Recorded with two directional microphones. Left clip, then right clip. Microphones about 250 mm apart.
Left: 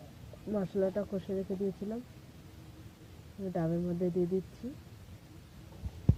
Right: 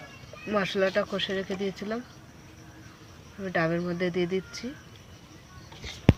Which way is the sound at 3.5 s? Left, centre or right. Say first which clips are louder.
Right 8 dB; centre.